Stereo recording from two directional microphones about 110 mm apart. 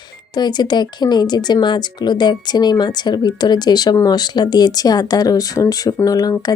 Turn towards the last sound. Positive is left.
turn(degrees=35)  # may be behind; listen again after turning